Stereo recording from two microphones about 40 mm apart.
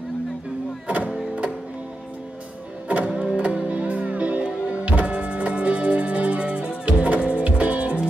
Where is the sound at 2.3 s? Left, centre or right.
Right.